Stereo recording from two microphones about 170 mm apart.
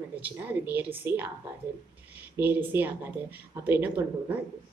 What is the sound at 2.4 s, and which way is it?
A woman's voice, 10° right (ahead or behind).